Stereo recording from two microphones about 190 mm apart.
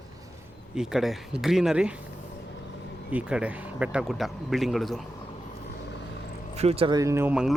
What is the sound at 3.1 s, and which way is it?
Speech, 5° right (ahead or behind).